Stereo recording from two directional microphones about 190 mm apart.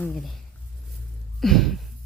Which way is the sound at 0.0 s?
Centre (ahead or behind).